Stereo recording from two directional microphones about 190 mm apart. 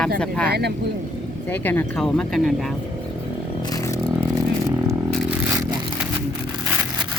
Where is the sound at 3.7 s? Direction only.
15° left (ahead or behind).